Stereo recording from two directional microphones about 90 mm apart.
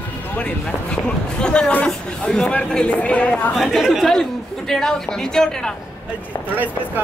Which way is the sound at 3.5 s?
Centre (ahead or behind).